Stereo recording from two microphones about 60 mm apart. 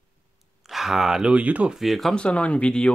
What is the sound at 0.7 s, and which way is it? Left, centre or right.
Speech, centre.